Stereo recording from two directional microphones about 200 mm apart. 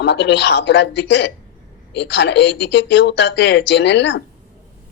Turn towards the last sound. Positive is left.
turn(degrees=60)  # may be behind; listen again after turning